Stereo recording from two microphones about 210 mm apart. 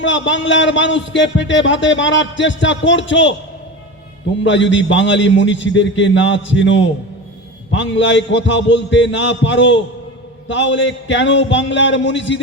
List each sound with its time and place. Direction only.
0.0 s a man's voice: 60° left (ahead or behind)
4.4 s a man's voice: 60° left (ahead or behind)